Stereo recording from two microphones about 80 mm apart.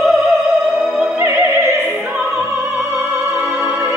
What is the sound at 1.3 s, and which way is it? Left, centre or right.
Opera, right.